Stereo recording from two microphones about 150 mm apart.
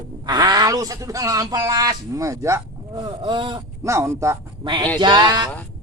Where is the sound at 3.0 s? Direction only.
30° right (ahead or behind).